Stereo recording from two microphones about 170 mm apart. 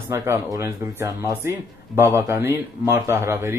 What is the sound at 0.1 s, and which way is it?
Speech, 15° right (ahead or behind).